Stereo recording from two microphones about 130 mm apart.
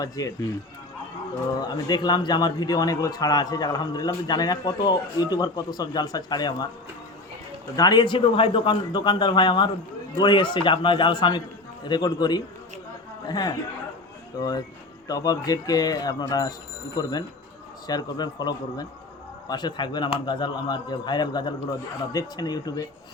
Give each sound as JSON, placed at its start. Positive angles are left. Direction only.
{"t": 0.0, "sound": "speech", "side_deg": 30}
{"t": 1.5, "sound": "a man's voice", "side_deg": 30}
{"t": 7.8, "sound": "a man's voice", "side_deg": 30}